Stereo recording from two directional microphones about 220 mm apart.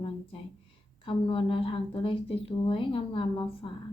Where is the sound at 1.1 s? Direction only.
25° left (ahead or behind).